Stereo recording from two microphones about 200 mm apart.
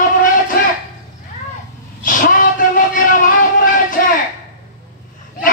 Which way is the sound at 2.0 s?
40° left (ahead or behind).